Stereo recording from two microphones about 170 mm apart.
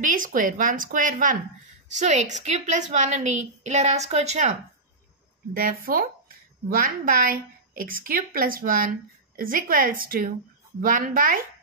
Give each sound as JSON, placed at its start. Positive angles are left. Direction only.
{"t": 0.0, "sound": "a woman's voice", "side_deg": -50}
{"t": 5.5, "sound": "a woman's voice", "side_deg": -60}